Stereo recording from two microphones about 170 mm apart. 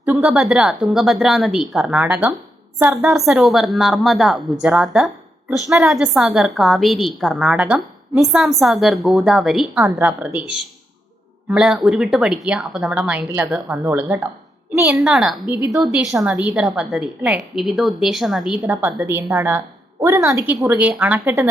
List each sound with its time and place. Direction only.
0.0 s a woman's voice: 10° right (ahead or behind)
3.0 s a woman's voice: centre (ahead or behind)
11.4 s a woman's voice: 5° right (ahead or behind)
15.4 s a woman's voice: 25° left (ahead or behind)
15.7 s a woman's voice: centre (ahead or behind)